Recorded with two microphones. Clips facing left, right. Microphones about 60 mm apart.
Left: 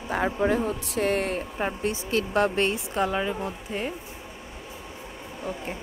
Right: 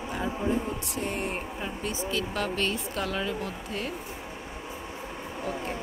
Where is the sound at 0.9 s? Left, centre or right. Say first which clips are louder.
Left 7 dB; left.